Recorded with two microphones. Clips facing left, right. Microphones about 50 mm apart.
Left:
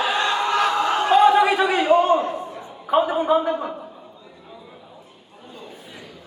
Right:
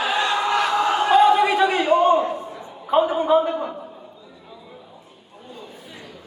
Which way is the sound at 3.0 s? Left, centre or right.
Left.